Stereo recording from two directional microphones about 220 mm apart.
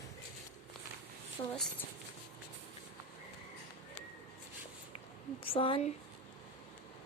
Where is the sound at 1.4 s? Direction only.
20° left (ahead or behind).